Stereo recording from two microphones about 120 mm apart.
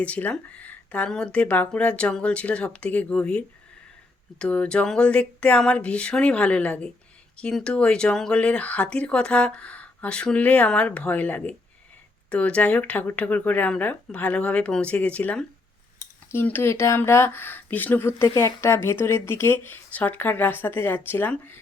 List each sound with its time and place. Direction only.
0.0 s speech: 10° left (ahead or behind)